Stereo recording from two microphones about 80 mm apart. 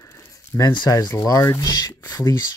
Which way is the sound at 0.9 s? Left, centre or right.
Left.